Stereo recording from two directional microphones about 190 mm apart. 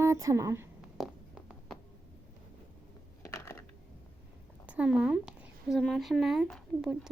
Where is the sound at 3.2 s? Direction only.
15° left (ahead or behind).